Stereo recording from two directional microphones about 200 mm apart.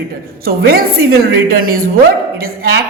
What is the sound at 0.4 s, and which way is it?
A woman's voice, 50° right (ahead or behind).